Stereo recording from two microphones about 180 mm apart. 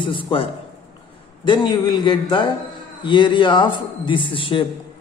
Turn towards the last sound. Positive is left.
turn(degrees=30)  # may be behind; listen again after turning